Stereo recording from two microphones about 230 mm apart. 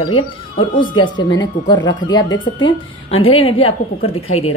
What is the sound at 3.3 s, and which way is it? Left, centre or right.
A woman's voice, left.